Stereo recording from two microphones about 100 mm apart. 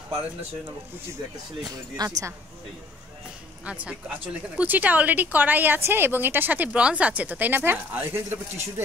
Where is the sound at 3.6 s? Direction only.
15° right (ahead or behind).